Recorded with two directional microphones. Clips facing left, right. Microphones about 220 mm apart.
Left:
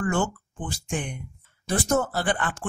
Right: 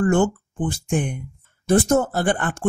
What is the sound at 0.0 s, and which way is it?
Speech, 50° right (ahead or behind).